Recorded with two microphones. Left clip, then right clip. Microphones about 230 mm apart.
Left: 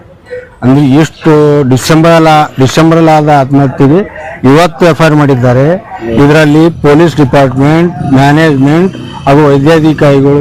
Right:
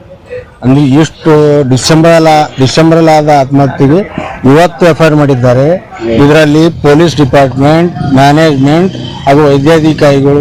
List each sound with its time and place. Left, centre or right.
0.7 s speech: left